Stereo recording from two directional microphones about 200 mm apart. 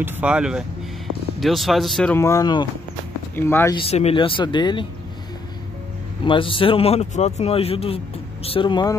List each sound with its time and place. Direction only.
0.0 s speech: 5° right (ahead or behind)
2.1 s speech: 15° left (ahead or behind)
3.7 s speech: 30° left (ahead or behind)
6.2 s speech: 25° left (ahead or behind)